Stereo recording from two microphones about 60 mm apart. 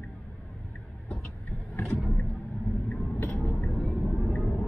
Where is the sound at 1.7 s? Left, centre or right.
Left.